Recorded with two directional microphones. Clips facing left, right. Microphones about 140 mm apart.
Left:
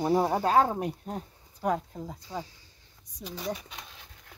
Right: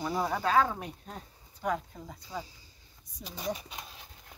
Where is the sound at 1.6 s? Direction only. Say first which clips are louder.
Left 4 dB; 30° left (ahead or behind).